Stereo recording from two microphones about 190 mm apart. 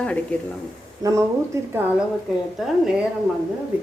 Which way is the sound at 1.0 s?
15° right (ahead or behind).